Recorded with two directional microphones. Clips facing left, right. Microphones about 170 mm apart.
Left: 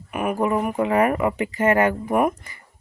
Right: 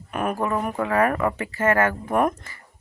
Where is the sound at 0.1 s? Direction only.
10° left (ahead or behind).